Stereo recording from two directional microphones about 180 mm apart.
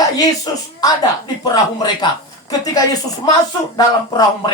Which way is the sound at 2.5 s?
20° left (ahead or behind).